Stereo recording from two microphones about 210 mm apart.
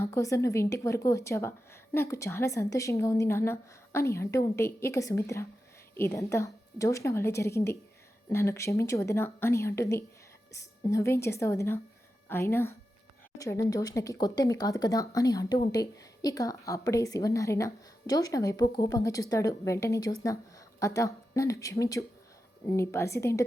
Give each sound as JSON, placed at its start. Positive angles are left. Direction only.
{"t": 0.0, "sound": "a woman's voice", "side_deg": 15}